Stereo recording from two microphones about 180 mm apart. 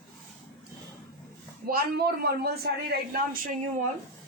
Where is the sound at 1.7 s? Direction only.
55° right (ahead or behind).